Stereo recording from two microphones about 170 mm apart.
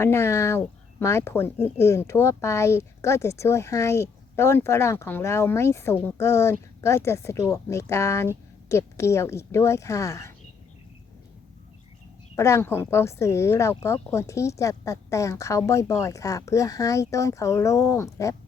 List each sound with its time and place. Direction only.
0.0 s speech: 15° left (ahead or behind)
12.4 s speech: 15° left (ahead or behind)